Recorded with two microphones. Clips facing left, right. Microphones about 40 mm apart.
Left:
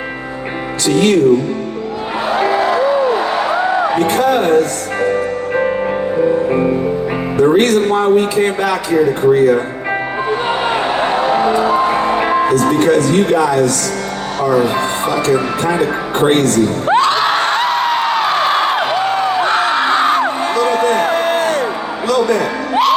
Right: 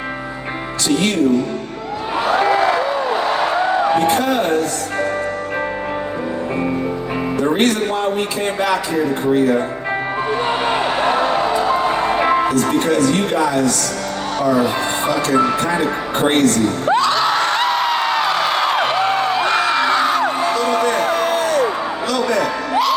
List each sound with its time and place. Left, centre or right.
3.9 s a man's voice: left
4.9 s music: centre
7.9 s speech: left
10.5 s music: centre
12.5 s speech: left
15.7 s speech: left
16.9 s screaming: left
17.6 s a sound: centre
18.3 s music: left